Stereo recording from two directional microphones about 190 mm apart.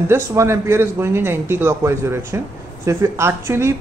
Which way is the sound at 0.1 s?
15° right (ahead or behind).